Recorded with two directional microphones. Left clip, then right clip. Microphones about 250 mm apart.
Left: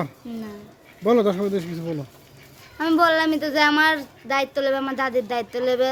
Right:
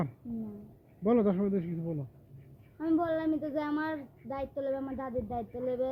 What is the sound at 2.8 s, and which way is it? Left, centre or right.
A woman's voice, left.